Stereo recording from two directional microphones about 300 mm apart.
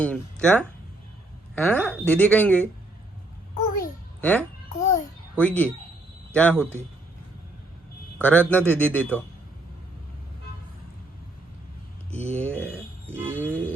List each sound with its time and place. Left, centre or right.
0.0 s speech: centre
4.2 s a child's voice: centre
4.8 s babbling: left
5.4 s speech: centre
8.2 s speech: centre
12.3 s speech: centre
13.1 s music: centre